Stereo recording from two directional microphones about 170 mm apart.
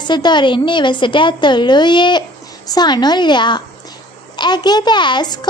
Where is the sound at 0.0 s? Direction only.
25° left (ahead or behind).